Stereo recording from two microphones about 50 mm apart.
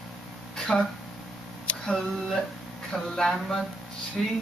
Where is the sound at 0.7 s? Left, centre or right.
Centre.